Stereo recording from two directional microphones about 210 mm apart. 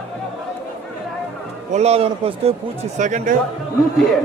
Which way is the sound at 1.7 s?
30° right (ahead or behind).